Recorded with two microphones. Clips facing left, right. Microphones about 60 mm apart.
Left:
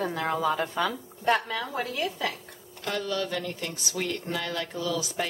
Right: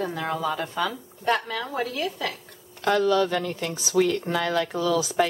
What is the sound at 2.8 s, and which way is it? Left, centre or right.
Speech, right.